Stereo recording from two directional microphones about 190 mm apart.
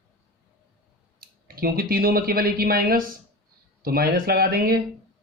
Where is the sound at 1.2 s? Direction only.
50° right (ahead or behind).